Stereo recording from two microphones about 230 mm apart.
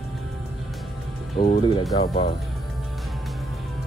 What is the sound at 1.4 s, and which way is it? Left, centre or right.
Speech, left.